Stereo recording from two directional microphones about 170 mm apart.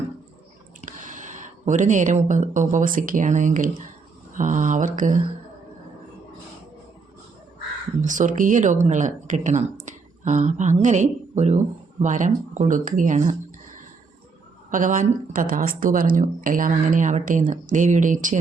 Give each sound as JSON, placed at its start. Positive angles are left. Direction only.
{"t": 0.8, "sound": "speech", "side_deg": -50}
{"t": 8.0, "sound": "speech", "side_deg": -50}
{"t": 14.7, "sound": "speech", "side_deg": -50}